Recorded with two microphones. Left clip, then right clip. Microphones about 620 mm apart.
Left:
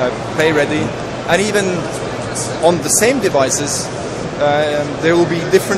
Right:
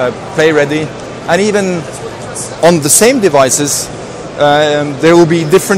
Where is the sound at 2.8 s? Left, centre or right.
Right.